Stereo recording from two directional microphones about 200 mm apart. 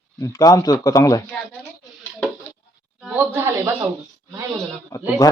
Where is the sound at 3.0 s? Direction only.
10° right (ahead or behind).